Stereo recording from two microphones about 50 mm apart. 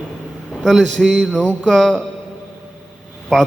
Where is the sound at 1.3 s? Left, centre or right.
Centre.